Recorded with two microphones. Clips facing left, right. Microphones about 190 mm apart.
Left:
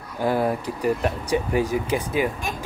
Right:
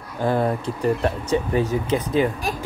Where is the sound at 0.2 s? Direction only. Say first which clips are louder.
Right 1 dB; 10° left (ahead or behind).